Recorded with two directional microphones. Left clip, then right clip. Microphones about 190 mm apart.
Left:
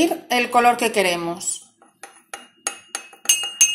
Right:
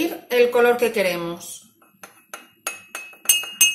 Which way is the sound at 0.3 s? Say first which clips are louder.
Right 2 dB; 35° left (ahead or behind).